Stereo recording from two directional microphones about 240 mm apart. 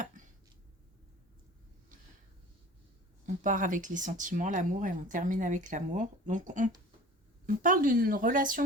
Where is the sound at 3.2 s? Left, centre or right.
Right.